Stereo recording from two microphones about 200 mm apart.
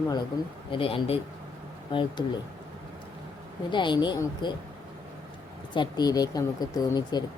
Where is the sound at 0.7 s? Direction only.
25° left (ahead or behind).